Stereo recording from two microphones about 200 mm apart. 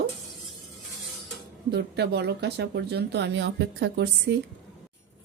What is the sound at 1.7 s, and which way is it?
Speech, 55° right (ahead or behind).